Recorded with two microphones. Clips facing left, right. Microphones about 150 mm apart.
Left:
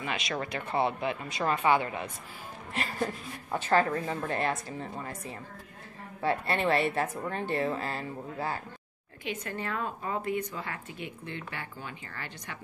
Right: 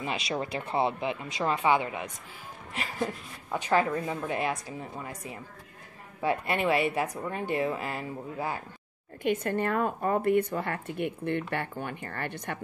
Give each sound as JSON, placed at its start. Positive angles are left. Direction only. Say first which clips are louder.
{"t": 0.0, "sound": "speech", "louder": "right 1 dB", "side_deg": -30}
{"t": 0.3, "sound": "speech", "louder": "right 2 dB", "side_deg": -20}
{"t": 9.2, "sound": "a woman's voice", "louder": "right 8 dB", "side_deg": -50}